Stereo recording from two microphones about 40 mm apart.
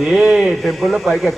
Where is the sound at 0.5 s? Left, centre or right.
Centre.